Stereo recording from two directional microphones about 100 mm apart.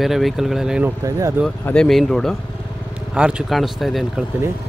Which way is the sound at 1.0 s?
30° right (ahead or behind).